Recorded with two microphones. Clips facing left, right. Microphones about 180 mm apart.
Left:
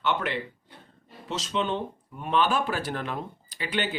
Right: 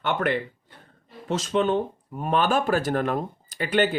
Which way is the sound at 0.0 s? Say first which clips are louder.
Right 3 dB; 50° right (ahead or behind).